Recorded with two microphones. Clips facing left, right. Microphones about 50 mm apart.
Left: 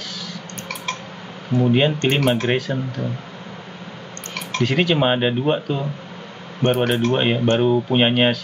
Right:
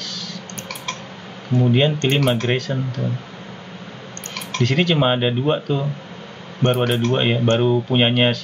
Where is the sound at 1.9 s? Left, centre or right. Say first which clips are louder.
Even; centre.